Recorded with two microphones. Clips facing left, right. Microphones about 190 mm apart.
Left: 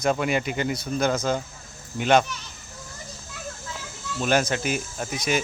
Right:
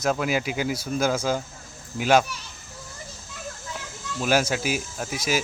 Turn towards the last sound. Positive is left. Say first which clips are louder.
# left 1 dB
turn(degrees=-5)  # may be behind; listen again after turning